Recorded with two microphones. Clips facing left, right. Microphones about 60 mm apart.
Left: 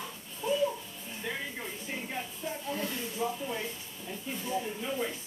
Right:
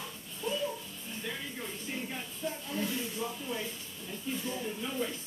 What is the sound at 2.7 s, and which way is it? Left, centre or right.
Snake, centre.